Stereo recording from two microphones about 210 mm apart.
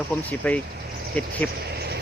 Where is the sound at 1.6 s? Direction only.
50° right (ahead or behind).